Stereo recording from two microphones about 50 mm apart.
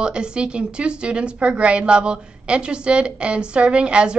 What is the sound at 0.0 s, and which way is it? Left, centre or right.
A woman's voice, centre.